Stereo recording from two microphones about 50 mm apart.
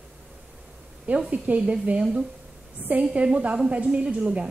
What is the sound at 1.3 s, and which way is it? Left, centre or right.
A woman's voice, right.